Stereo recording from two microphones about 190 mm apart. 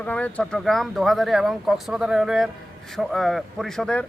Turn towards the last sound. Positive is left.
turn(degrees=5)  # may be behind; listen again after turning